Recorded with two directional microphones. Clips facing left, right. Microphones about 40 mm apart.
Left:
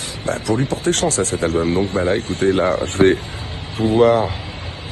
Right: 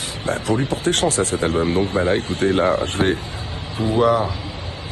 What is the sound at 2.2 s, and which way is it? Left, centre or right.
Speech, left.